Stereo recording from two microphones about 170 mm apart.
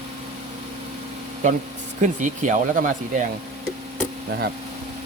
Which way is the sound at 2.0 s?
45° right (ahead or behind).